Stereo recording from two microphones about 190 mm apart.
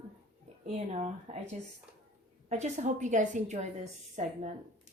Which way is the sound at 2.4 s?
35° right (ahead or behind).